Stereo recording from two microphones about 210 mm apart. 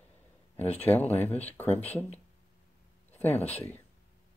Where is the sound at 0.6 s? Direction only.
30° left (ahead or behind).